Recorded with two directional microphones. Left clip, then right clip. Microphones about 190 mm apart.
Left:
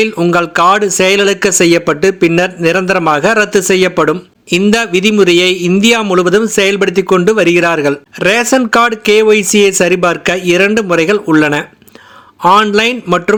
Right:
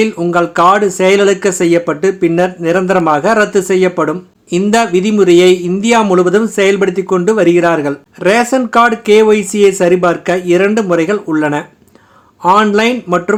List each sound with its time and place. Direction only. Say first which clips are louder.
0.0 s a man's voice: left 1 dB; 15° left (ahead or behind)